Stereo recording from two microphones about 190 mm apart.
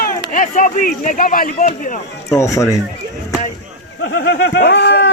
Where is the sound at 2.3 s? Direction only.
15° left (ahead or behind).